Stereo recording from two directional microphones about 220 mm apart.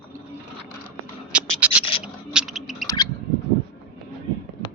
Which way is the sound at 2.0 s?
5° right (ahead or behind).